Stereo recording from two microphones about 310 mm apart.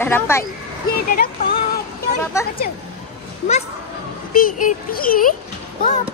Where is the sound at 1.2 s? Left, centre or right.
Left.